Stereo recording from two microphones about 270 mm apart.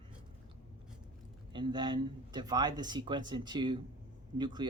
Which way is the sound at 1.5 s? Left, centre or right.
Centre.